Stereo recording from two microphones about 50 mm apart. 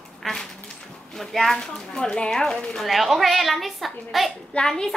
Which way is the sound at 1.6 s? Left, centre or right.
Centre.